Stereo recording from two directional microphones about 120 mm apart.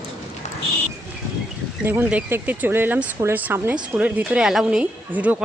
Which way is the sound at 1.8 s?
15° right (ahead or behind).